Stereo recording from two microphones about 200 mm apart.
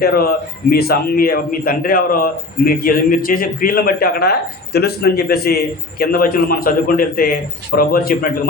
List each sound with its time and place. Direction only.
0.0 s a man's voice: 50° left (ahead or behind)